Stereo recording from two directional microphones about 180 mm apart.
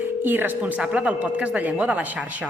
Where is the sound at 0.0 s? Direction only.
10° right (ahead or behind).